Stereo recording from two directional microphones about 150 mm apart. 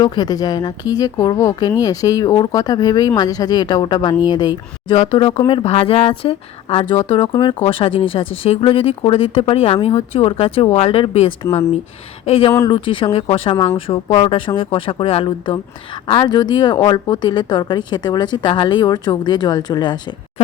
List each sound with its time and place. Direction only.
0.0 s a woman's voice: 25° left (ahead or behind)